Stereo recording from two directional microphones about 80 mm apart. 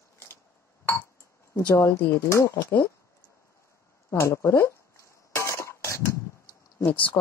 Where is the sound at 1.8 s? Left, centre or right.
Left.